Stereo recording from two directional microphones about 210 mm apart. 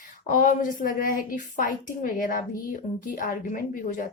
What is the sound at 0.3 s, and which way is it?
A woman's voice, 40° left (ahead or behind).